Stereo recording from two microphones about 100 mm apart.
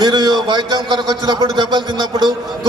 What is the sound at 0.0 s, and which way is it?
A man's voice, 45° right (ahead or behind).